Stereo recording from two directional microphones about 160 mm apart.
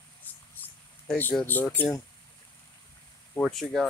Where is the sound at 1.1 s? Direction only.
5° left (ahead or behind).